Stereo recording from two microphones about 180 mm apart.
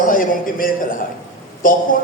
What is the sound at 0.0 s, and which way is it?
A man's voice, 50° left (ahead or behind).